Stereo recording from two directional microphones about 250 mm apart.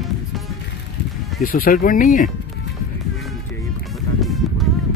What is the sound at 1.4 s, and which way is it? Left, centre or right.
Speech, left.